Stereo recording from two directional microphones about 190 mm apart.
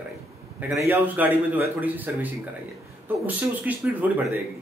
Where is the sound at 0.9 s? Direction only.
10° right (ahead or behind).